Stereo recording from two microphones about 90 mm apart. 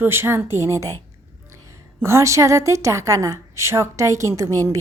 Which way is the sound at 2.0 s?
30° right (ahead or behind).